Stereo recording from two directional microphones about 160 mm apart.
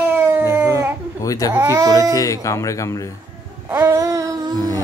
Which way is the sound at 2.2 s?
20° left (ahead or behind).